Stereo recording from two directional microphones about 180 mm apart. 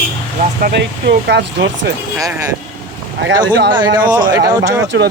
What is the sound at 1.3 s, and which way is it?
Speech, 80° right.